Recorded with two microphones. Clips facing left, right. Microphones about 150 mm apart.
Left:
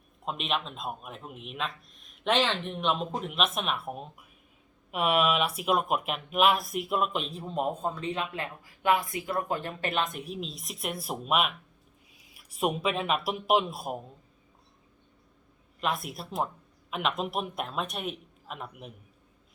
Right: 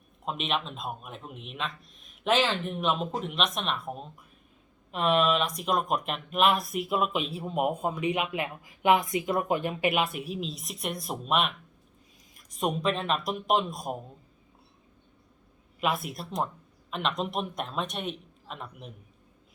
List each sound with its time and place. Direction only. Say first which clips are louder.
0.3 s speech: right 1 dB; centre (ahead or behind)
15.8 s speech: right 2 dB; centre (ahead or behind)